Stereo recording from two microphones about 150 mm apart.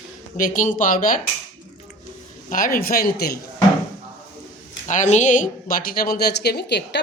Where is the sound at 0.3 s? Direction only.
60° left (ahead or behind).